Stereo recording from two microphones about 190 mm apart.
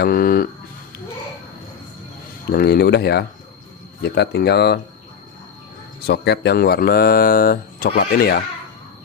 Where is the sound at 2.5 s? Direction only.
55° left (ahead or behind).